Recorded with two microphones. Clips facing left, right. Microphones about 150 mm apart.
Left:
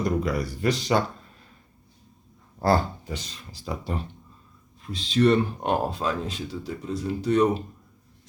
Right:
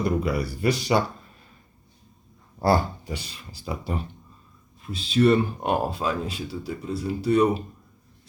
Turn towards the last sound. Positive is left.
turn(degrees=-10)  # may be behind; listen again after turning